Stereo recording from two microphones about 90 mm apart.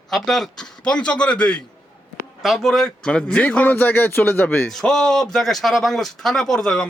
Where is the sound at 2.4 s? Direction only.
Centre (ahead or behind); by 4.7 s 25° left (ahead or behind).